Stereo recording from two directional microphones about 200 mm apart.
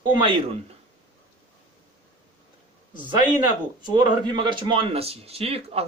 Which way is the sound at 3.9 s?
20° right (ahead or behind).